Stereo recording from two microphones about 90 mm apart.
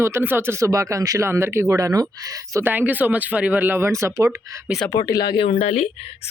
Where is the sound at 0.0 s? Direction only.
25° right (ahead or behind).